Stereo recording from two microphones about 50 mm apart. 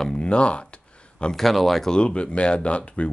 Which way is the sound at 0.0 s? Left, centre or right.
Centre.